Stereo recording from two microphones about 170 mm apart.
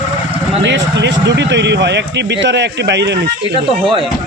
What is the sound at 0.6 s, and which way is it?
Speech, 90° right.